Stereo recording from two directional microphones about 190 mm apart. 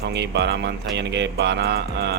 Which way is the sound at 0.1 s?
65° right (ahead or behind).